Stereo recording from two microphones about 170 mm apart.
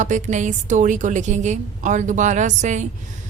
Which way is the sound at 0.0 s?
45° right (ahead or behind).